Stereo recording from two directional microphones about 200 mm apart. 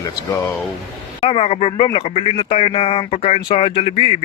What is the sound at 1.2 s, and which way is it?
Speech, 30° left (ahead or behind).